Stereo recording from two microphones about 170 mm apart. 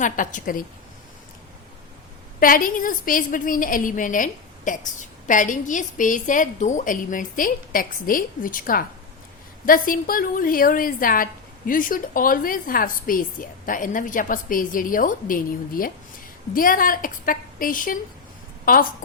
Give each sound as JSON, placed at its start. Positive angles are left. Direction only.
{"t": 0.0, "sound": "a woman's voice", "side_deg": 50}
{"t": 2.4, "sound": "a woman's voice", "side_deg": 55}